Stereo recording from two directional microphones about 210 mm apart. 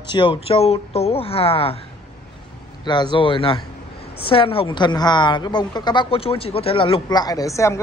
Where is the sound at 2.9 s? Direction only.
20° left (ahead or behind).